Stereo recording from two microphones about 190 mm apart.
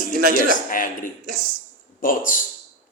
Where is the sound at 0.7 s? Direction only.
45° left (ahead or behind).